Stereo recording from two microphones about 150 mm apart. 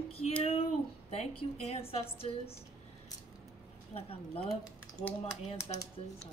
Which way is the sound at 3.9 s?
40° left (ahead or behind).